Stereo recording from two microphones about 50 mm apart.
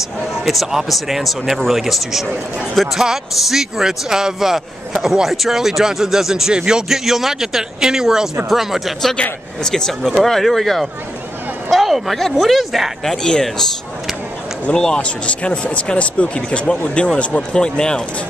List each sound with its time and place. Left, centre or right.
0.5 s a man's voice: centre
9.6 s speech: centre
13.0 s speech: centre
14.7 s speech: centre
15.0 s speech: left